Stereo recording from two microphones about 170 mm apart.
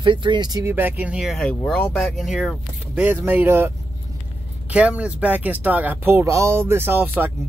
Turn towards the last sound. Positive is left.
turn(degrees=-10)  # may be behind; listen again after turning